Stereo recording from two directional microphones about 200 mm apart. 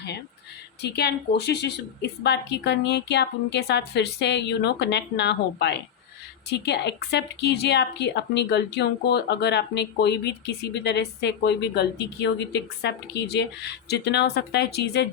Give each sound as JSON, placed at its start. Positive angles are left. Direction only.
{"t": 0.8, "sound": "speech", "side_deg": 55}